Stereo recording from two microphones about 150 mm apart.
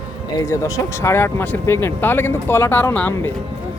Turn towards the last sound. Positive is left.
turn(degrees=15)  # may be behind; listen again after turning